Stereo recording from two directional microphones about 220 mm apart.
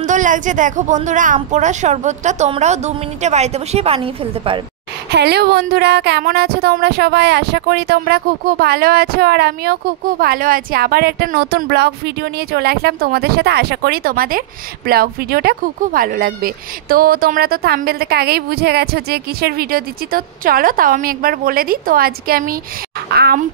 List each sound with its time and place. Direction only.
0.0 s a woman's voice: 35° right (ahead or behind)
5.1 s a woman's voice: 50° right (ahead or behind)